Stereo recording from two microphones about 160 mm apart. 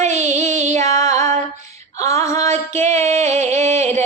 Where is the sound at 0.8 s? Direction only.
20° left (ahead or behind).